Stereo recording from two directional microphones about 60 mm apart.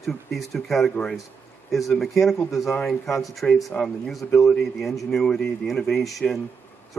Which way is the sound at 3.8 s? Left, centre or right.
Centre.